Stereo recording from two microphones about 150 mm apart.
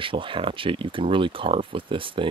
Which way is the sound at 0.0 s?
35° right (ahead or behind).